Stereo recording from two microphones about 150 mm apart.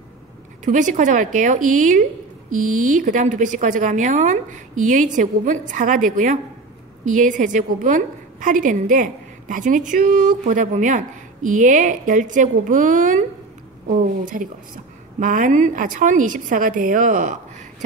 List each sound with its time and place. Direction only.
0.7 s a woman's voice: 55° right (ahead or behind)